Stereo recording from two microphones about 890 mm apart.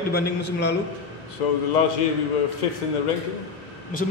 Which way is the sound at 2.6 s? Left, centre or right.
Left.